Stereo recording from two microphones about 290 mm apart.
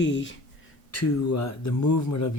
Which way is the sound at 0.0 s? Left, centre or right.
Left.